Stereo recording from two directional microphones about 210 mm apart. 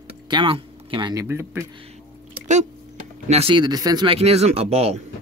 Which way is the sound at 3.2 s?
30° right (ahead or behind).